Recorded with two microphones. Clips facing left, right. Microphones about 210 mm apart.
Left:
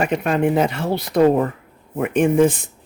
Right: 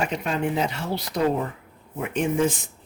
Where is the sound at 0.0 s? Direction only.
60° left (ahead or behind).